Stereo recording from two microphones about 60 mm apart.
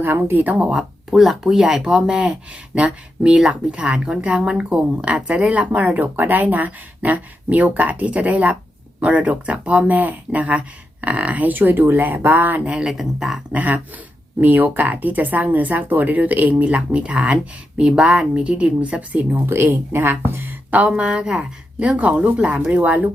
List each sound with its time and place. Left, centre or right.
0.0 s speech: right
0.5 s speech: centre
1.1 s speech: centre; by 12.6 s right
12.6 s speech: centre
12.9 s speech: centre
13.5 s speech: right
19.3 s speech: right